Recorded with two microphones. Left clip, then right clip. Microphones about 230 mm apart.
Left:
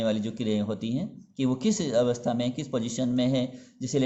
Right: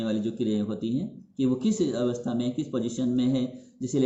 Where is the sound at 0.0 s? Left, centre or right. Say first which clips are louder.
Left 1 dB; left.